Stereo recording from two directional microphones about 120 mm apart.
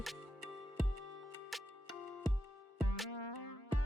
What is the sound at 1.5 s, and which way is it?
Music, centre (ahead or behind).